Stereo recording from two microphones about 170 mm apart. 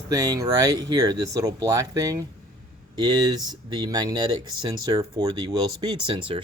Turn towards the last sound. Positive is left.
turn(degrees=-30)  # may be behind; listen again after turning